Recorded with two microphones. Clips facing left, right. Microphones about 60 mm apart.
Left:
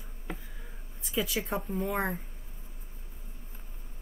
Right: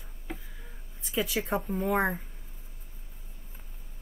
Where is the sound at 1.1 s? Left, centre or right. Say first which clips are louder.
Right 2 dB; centre.